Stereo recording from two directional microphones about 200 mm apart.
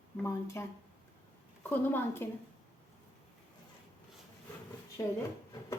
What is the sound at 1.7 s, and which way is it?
Speech, 10° left (ahead or behind).